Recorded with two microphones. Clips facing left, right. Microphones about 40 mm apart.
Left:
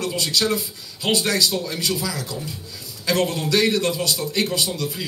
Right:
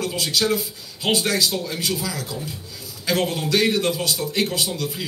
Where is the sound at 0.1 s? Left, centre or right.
Centre.